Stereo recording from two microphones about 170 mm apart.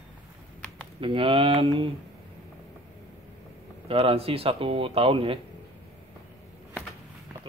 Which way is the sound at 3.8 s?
35° right (ahead or behind).